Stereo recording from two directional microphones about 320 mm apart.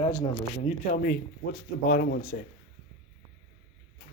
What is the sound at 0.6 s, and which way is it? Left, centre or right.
Speech, left.